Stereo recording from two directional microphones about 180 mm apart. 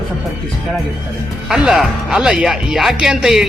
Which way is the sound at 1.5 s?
Centre (ahead or behind).